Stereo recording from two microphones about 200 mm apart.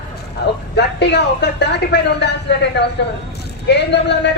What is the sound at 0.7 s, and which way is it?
A woman's voice, 60° left (ahead or behind).